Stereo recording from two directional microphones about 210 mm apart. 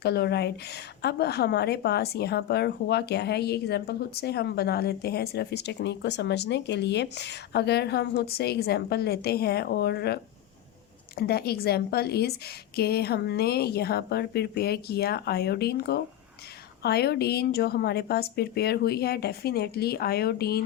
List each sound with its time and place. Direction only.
0.0 s a woman's voice: 50° left (ahead or behind)